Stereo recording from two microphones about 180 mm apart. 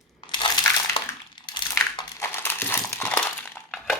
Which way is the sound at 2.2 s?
10° left (ahead or behind).